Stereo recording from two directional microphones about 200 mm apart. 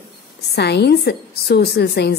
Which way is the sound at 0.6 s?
55° left (ahead or behind).